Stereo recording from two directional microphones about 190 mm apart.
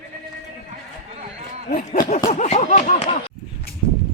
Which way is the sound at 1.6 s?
40° left (ahead or behind).